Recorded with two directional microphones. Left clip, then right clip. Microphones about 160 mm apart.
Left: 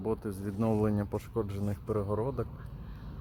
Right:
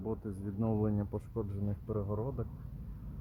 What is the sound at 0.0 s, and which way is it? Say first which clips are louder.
Speech: left 6 dB; 25° left (ahead or behind).